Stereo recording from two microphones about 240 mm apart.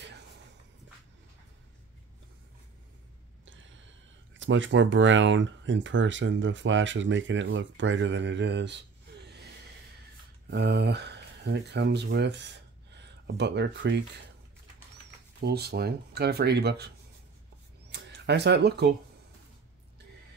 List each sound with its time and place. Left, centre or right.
3.4 s a sound: right
4.4 s speech: right
10.5 s speech: right
15.4 s speech: right
17.9 s speech: right